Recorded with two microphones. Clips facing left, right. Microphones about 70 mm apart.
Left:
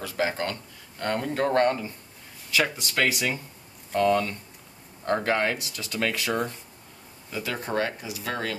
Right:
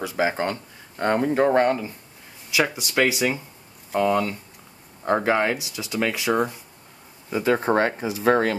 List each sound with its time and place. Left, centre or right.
0.0 s speech: centre
7.2 s speech: right